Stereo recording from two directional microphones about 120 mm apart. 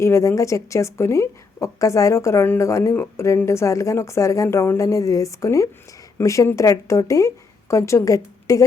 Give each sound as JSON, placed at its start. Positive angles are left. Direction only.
{"t": 0.0, "sound": "speech", "side_deg": 25}